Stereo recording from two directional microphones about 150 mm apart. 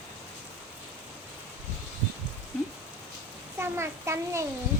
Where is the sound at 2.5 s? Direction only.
10° left (ahead or behind).